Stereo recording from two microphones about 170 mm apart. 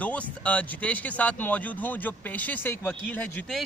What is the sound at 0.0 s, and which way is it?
Speech, 10° left (ahead or behind).